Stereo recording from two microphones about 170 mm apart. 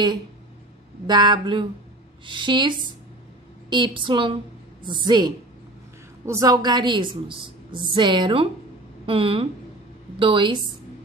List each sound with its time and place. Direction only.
1.0 s a woman's voice: 25° right (ahead or behind)